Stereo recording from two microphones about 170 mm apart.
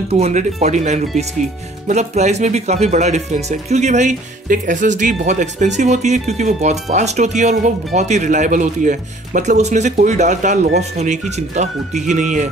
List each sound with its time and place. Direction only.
0.1 s speech: 45° right (ahead or behind)